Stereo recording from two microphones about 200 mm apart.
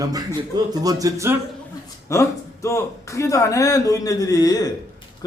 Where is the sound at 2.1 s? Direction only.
15° left (ahead or behind).